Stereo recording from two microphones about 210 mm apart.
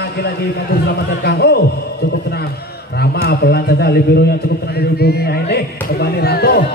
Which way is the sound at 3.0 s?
50° left (ahead or behind).